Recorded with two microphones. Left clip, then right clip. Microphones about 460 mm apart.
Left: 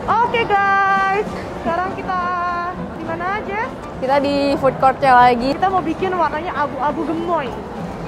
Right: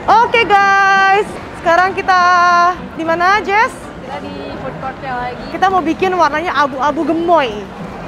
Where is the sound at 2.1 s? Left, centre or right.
Right.